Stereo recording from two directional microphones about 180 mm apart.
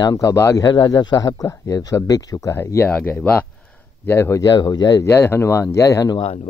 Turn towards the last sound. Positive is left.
turn(degrees=30)  # may be behind; listen again after turning